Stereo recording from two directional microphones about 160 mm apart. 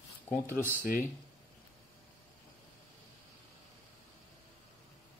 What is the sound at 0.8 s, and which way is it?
Speech, 60° left (ahead or behind).